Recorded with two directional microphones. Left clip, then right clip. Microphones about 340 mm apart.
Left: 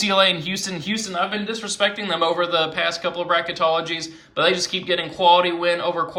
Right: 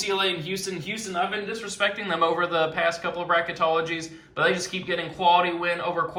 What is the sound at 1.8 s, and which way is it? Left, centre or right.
A man's voice, centre.